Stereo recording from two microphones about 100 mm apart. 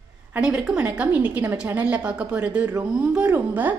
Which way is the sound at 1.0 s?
20° right (ahead or behind).